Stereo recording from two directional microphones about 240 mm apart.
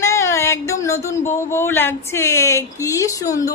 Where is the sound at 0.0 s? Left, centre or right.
Centre.